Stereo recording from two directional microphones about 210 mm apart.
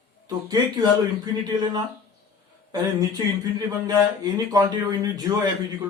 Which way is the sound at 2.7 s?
20° right (ahead or behind).